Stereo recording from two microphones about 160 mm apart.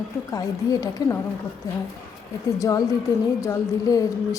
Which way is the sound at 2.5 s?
20° left (ahead or behind).